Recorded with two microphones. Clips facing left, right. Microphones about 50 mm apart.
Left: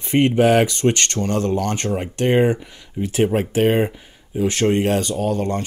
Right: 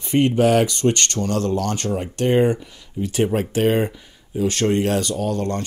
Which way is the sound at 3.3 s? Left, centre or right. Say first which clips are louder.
Left 1 dB; centre.